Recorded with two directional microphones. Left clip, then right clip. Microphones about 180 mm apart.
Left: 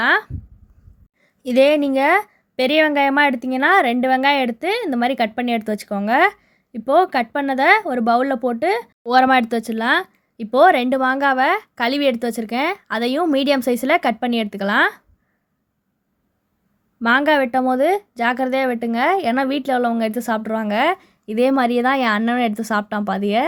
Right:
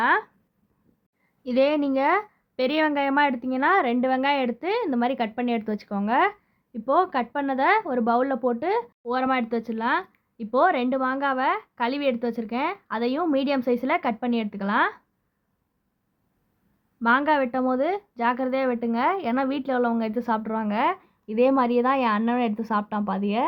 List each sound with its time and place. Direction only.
0.0 s a sound: 25° left (ahead or behind)
1.4 s a woman's voice: 25° left (ahead or behind)
9.0 s a woman's voice: 35° left (ahead or behind)
17.0 s a woman's voice: 30° left (ahead or behind)